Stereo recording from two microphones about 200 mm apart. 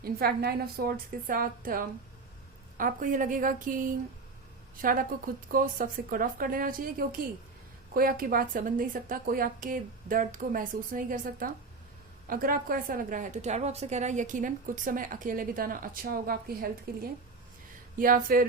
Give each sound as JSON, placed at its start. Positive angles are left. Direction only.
{"t": 0.0, "sound": "a woman's voice", "side_deg": -50}